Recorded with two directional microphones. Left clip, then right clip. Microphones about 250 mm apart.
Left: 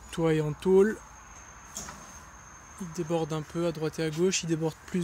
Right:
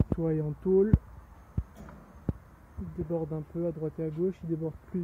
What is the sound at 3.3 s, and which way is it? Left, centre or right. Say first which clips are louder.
Speech: left 3 dB; left.